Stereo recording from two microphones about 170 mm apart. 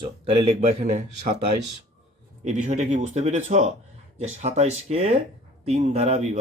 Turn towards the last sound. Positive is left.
turn(degrees=-40)  # may be behind; listen again after turning